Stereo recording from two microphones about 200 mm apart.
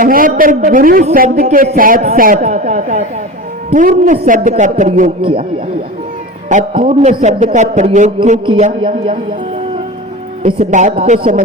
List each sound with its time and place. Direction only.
0.0 s a man's voice: 45° right (ahead or behind)
5.2 s a man's voice: 25° right (ahead or behind)
6.5 s a man's voice: 35° right (ahead or behind)
10.4 s a man's voice: 40° right (ahead or behind)